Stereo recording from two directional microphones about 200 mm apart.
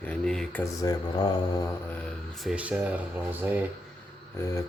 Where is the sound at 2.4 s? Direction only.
5° right (ahead or behind).